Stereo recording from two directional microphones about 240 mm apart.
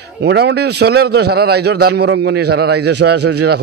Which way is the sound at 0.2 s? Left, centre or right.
Right.